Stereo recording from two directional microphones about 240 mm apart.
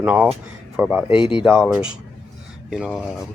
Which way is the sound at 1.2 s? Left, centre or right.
Left.